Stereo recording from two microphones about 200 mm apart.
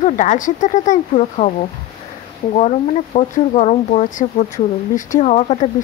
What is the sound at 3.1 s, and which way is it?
Speech, 35° left (ahead or behind).